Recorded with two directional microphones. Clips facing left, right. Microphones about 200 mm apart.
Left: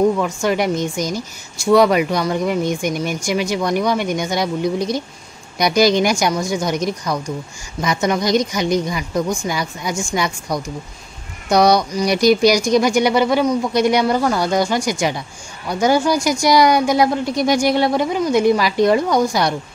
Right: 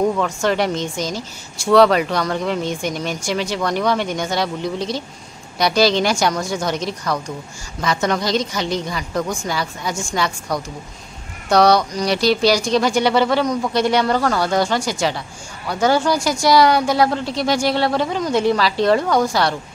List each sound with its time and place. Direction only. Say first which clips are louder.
0.2 s speech: left 1 dB; 10° left (ahead or behind)